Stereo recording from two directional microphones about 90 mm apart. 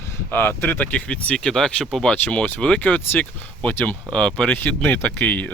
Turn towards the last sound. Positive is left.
turn(degrees=15)  # may be behind; listen again after turning